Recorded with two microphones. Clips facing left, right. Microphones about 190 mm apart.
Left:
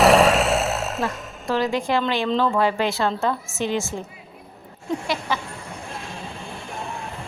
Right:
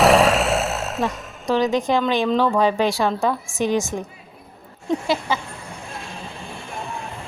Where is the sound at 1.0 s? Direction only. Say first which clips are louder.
Right 3 dB; 15° right (ahead or behind).